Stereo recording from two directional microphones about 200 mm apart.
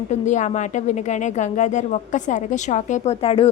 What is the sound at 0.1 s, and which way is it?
A woman's voice, 35° left (ahead or behind).